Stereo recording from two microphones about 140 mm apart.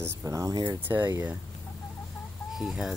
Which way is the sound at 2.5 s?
Centre (ahead or behind).